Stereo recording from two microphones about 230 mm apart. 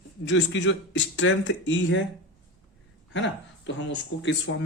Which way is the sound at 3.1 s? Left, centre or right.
Left.